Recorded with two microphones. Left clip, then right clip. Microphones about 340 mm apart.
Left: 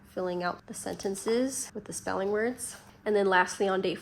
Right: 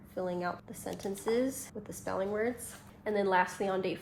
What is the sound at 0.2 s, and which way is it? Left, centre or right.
Speech, left.